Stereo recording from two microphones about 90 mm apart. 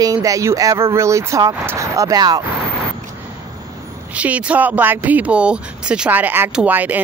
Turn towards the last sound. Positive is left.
turn(degrees=-20)  # may be behind; listen again after turning